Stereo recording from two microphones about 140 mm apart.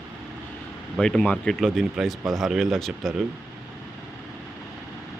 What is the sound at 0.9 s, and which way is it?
Speech, 5° left (ahead or behind).